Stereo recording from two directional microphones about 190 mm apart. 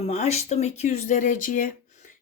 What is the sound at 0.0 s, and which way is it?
Speech, 35° left (ahead or behind).